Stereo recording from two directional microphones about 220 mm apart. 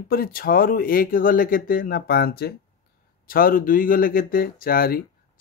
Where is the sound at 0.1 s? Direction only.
40° left (ahead or behind).